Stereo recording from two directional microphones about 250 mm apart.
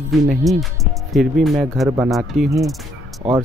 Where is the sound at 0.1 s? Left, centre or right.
Centre.